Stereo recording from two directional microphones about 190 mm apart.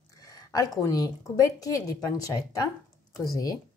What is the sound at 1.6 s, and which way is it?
Speech, 20° left (ahead or behind).